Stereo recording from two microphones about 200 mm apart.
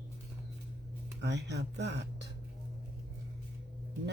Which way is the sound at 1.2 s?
60° right (ahead or behind).